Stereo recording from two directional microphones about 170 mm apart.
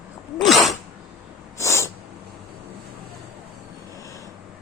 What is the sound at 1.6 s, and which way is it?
Snort, 15° left (ahead or behind).